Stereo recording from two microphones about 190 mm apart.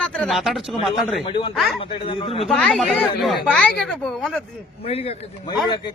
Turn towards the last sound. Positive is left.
turn(degrees=30)  # may be behind; listen again after turning